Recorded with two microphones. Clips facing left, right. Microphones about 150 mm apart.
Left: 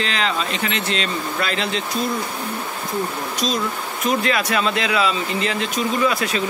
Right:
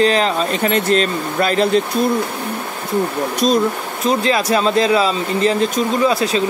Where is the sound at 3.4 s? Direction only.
50° right (ahead or behind).